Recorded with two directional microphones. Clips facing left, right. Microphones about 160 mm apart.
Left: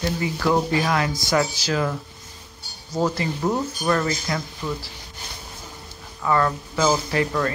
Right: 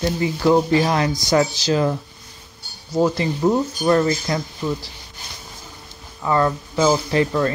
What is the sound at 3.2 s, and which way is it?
Speech, 25° right (ahead or behind).